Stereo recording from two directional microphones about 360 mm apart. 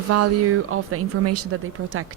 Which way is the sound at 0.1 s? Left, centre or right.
Right.